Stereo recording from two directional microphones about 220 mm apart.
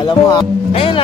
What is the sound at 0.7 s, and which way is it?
Speech, 25° left (ahead or behind).